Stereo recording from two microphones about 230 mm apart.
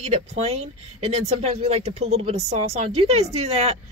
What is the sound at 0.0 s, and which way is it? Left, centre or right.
Speech, right.